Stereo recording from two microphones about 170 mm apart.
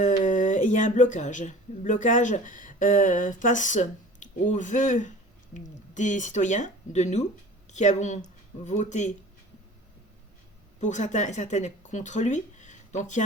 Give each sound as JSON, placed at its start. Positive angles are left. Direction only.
{"t": 0.0, "sound": "speech", "side_deg": 45}
{"t": 10.8, "sound": "speech", "side_deg": 45}